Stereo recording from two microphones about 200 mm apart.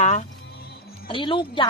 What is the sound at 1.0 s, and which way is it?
Speech, 25° left (ahead or behind).